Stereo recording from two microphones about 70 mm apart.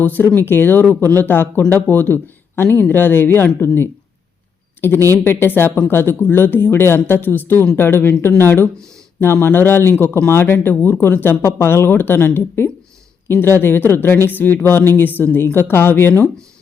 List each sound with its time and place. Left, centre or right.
0.0 s a woman's voice: left
5.1 s a woman's voice: left